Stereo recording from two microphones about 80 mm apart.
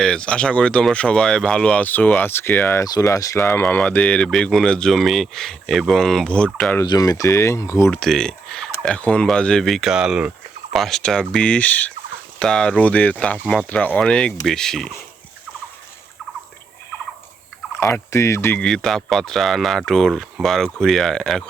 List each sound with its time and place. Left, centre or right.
0.0 s speech: centre
2.8 s speech: left
3.4 s speech: left
7.0 s speech: left
7.9 s speech: centre
10.7 s speech: centre
12.7 s speech: centre
17.9 s speech: left
18.6 s speech: centre